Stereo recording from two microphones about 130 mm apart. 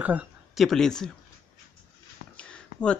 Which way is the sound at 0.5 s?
5° left (ahead or behind).